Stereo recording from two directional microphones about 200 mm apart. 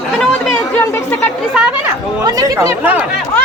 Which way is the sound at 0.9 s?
10° left (ahead or behind).